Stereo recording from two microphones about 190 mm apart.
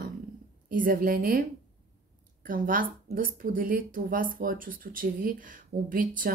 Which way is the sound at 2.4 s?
45° right (ahead or behind).